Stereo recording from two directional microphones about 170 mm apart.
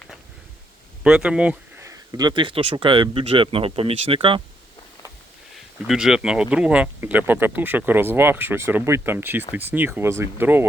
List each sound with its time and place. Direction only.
1.0 s speech: 5° right (ahead or behind); by 4.4 s 30° right (ahead or behind)
5.5 s speech: centre (ahead or behind)